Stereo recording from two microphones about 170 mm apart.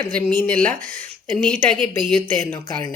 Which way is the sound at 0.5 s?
55° right (ahead or behind).